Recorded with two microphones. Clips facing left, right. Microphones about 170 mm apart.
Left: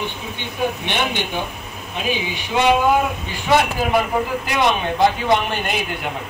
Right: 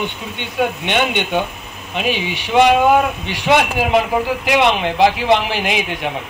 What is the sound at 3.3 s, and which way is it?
Speech, 85° right.